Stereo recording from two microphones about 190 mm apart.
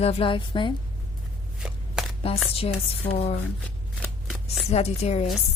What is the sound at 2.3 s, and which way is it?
A woman's voice, 30° left (ahead or behind).